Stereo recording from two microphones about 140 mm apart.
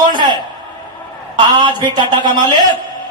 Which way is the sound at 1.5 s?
35° right (ahead or behind).